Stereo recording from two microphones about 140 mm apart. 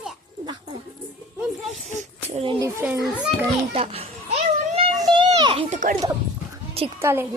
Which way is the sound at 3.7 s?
45° right (ahead or behind).